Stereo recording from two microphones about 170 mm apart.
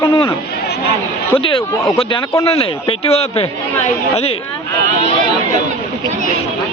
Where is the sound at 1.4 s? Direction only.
30° left (ahead or behind).